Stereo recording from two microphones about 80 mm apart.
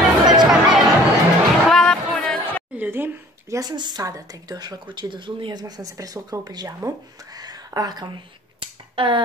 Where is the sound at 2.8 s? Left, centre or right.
Right.